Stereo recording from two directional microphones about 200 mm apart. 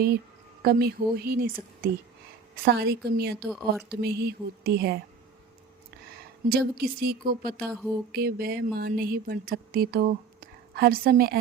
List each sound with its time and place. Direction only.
0.6 s speech: 50° right (ahead or behind)
3.5 s a woman's voice: centre (ahead or behind)
3.8 s speech: 50° right (ahead or behind)
6.5 s speech: 50° right (ahead or behind)